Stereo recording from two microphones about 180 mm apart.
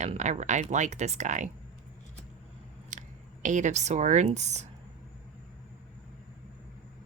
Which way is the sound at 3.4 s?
45° right (ahead or behind).